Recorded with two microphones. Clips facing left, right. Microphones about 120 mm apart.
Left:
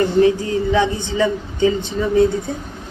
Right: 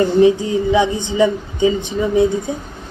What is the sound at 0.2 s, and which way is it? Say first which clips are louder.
Speech: right 2 dB; 20° right (ahead or behind).